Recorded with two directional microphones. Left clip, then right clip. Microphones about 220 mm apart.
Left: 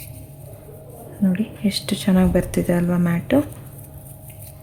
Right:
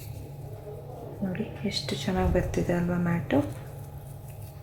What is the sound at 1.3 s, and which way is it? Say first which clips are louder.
A woman's voice: left 6 dB; 45° left (ahead or behind).